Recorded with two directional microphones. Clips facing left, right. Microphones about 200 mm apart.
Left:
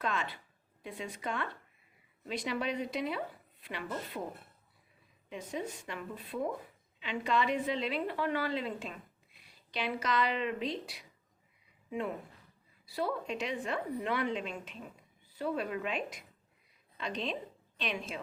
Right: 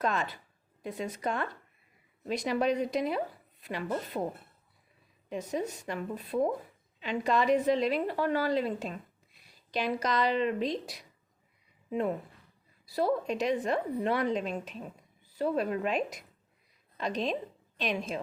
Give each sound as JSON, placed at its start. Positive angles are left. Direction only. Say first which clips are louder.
{"t": 0.0, "sound": "a woman's voice", "louder": "right 5 dB", "side_deg": -40}
{"t": 5.3, "sound": "a woman's voice", "louder": "right 5 dB", "side_deg": -40}
{"t": 12.8, "sound": "a woman's voice", "louder": "right 6 dB", "side_deg": -40}